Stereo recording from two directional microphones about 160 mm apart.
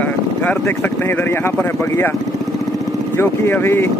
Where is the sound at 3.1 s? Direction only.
15° left (ahead or behind).